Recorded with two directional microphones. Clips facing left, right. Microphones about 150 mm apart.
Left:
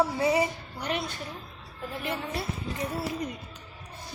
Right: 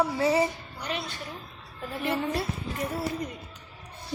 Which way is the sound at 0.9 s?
60° left (ahead or behind).